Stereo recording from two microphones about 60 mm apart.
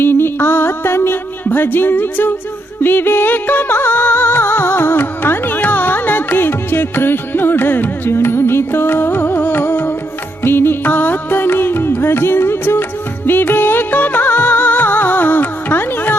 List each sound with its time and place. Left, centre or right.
0.0 s music: left